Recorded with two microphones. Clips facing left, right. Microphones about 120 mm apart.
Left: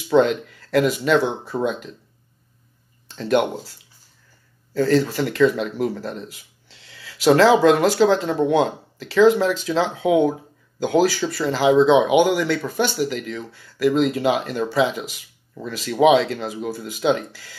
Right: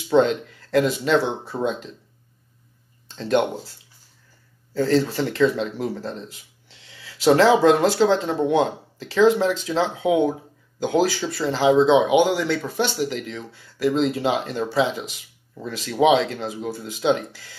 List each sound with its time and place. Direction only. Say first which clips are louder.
0.1 s speech: left 1 dB; 25° right (ahead or behind)
3.2 s speech: left 1 dB; 25° right (ahead or behind)
4.7 s speech: left 2 dB; 25° right (ahead or behind)